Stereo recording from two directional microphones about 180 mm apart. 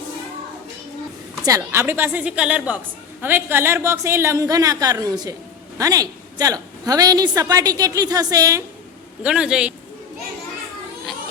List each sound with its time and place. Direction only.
1.5 s a woman's voice: 15° right (ahead or behind)
9.2 s a man's voice: 5° right (ahead or behind)